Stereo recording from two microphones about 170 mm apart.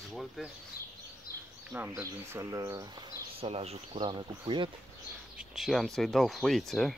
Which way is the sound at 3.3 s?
35° right (ahead or behind).